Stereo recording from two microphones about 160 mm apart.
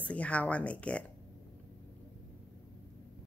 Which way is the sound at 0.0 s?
10° left (ahead or behind).